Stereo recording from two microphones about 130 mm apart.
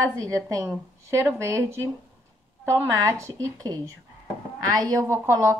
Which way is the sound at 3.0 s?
25° right (ahead or behind).